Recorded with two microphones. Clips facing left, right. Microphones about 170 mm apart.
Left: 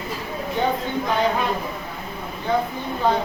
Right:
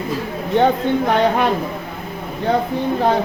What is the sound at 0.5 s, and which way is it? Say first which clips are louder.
Speech: right 8 dB; 65° right (ahead or behind).